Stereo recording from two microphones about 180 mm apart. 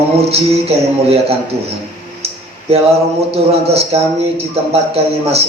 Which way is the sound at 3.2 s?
35° right (ahead or behind).